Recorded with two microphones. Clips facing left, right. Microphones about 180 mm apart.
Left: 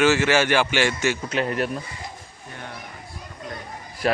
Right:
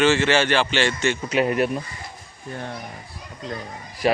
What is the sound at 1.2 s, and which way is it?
Speech, 10° right (ahead or behind).